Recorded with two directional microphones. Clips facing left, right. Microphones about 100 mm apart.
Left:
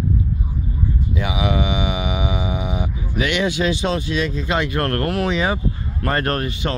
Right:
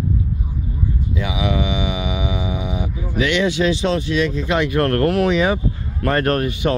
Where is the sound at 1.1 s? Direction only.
50° left (ahead or behind).